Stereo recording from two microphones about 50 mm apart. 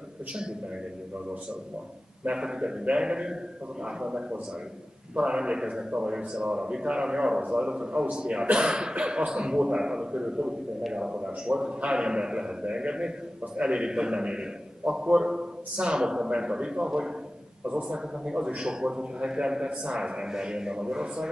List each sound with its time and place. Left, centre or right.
0.3 s a man's voice: centre
2.3 s a man's voice: centre